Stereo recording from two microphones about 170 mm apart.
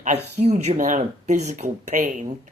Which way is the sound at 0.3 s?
40° right (ahead or behind).